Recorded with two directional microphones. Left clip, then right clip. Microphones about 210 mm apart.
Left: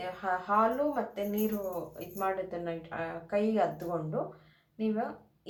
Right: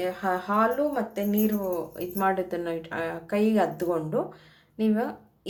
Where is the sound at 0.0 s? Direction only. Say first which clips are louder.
Right 6 dB; 50° right (ahead or behind).